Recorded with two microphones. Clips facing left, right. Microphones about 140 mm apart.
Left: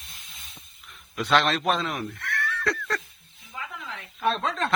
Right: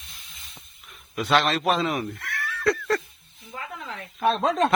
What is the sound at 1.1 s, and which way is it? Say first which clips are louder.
Speech: right 1 dB; 5° right (ahead or behind).